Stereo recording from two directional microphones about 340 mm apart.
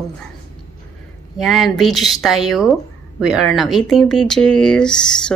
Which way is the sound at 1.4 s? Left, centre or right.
Centre.